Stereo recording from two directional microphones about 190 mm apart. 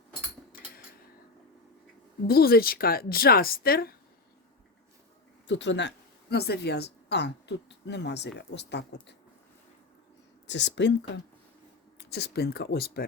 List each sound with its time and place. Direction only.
2.2 s speech: 55° left (ahead or behind)
5.5 s speech: 70° left (ahead or behind)
6.3 s speech: 60° left (ahead or behind)
10.4 s speech: 70° left (ahead or behind)